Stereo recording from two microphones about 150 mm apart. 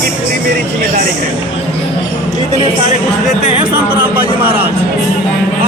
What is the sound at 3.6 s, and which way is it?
A man's voice, 15° right (ahead or behind).